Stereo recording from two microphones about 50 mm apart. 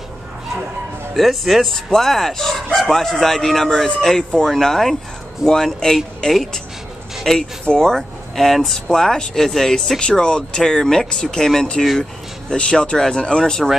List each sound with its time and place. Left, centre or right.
1.1 s speech: centre
7.3 s speech: centre